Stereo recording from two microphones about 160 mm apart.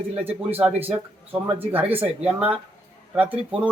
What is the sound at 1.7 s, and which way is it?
Speech, 10° right (ahead or behind).